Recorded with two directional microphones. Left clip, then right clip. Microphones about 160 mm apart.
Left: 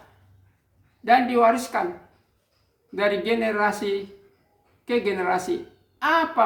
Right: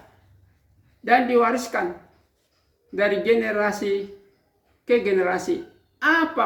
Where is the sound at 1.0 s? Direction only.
10° left (ahead or behind).